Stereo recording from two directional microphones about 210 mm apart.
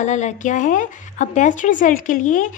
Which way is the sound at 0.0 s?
35° left (ahead or behind).